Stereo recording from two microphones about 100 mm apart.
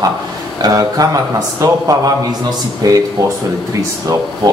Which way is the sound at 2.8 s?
40° right (ahead or behind).